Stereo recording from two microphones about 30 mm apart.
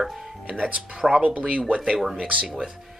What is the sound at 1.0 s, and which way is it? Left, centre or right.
Speech, right.